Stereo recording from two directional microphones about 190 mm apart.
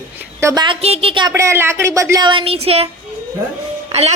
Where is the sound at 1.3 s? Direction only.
15° right (ahead or behind).